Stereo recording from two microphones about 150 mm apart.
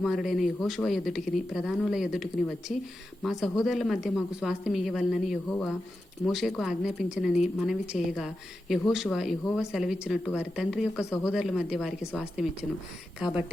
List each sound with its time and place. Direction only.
0.0 s a woman's voice: centre (ahead or behind)
5.5 s a woman's voice: 10° left (ahead or behind)
11.0 s speech: 20° left (ahead or behind)
11.3 s a woman's voice: 5° right (ahead or behind)